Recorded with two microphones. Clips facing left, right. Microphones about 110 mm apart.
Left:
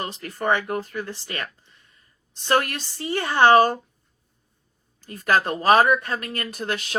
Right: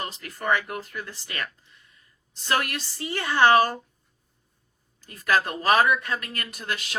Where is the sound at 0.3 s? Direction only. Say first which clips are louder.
Left 3 dB; 30° left (ahead or behind).